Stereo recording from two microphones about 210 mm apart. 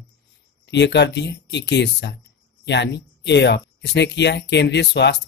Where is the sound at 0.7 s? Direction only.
55° left (ahead or behind).